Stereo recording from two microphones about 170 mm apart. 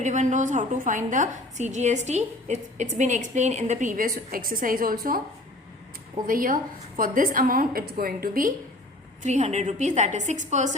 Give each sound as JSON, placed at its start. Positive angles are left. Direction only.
{"t": 0.0, "sound": "a woman's voice", "side_deg": -45}
{"t": 6.2, "sound": "a woman's voice", "side_deg": -55}
{"t": 9.2, "sound": "a woman's voice", "side_deg": -45}